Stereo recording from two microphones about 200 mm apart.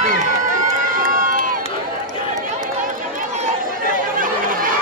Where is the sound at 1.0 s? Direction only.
45° right (ahead or behind).